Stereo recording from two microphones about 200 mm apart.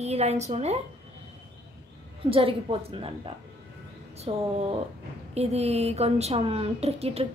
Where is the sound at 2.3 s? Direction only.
25° right (ahead or behind).